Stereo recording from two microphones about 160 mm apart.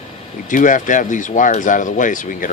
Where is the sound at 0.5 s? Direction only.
55° left (ahead or behind).